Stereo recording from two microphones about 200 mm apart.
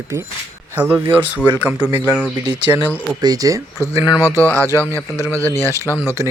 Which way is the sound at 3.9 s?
25° left (ahead or behind).